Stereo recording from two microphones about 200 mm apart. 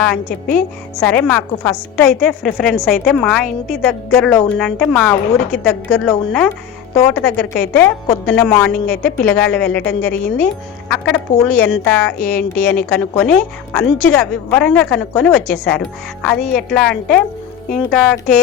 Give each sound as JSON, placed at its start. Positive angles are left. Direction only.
{"t": 0.5, "sound": "a woman's voice", "side_deg": 5}
{"t": 10.8, "sound": "a woman's voice", "side_deg": 5}
{"t": 12.2, "sound": "speech", "side_deg": 45}
{"t": 12.9, "sound": "a woman's voice", "side_deg": 5}